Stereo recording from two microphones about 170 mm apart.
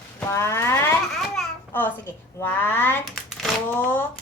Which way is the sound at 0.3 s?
15° left (ahead or behind).